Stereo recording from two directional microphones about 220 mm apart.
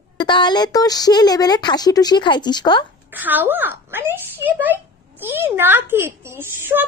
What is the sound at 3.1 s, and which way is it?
A child's voice, 10° right (ahead or behind).